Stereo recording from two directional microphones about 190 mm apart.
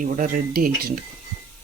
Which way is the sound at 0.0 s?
45° right (ahead or behind).